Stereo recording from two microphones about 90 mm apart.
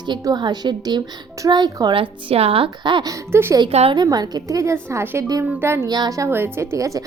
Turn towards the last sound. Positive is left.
turn(degrees=-35)  # may be behind; listen again after turning